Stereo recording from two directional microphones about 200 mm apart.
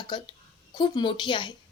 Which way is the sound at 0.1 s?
20° left (ahead or behind).